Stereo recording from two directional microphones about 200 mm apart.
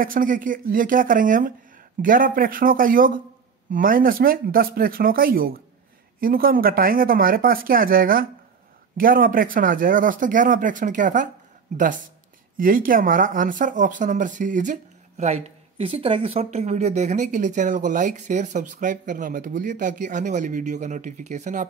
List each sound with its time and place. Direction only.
0.0 s speech: 45° right (ahead or behind)